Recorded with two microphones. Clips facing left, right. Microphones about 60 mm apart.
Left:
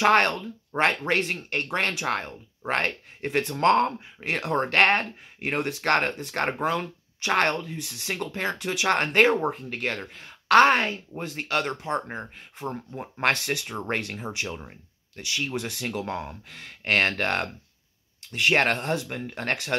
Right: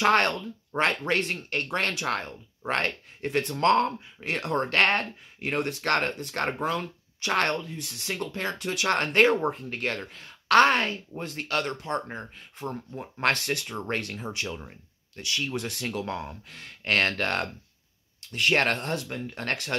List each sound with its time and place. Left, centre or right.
0.0 s speech: centre
5.9 s speech: centre